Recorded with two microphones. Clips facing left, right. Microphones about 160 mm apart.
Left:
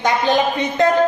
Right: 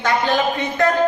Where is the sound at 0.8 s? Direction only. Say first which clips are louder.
Left 2 dB; 20° left (ahead or behind).